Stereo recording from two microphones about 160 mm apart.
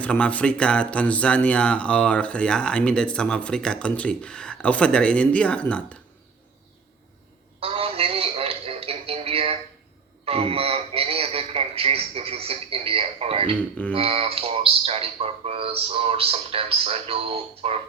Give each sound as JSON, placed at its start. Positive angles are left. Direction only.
{"t": 0.0, "sound": "speech", "side_deg": 10}
{"t": 7.6, "sound": "a sound", "side_deg": -35}
{"t": 13.9, "sound": "speech", "side_deg": -35}